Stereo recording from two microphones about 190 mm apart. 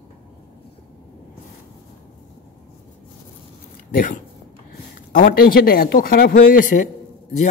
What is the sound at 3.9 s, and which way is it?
Speech, 45° left (ahead or behind).